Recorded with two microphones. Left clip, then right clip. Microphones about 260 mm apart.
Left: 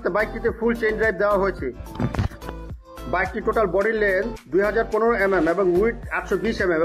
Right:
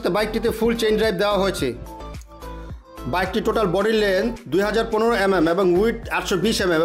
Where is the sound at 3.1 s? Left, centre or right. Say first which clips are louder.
Right 1 dB; right.